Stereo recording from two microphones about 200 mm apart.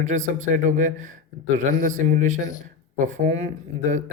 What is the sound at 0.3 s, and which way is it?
Speech, 40° right (ahead or behind).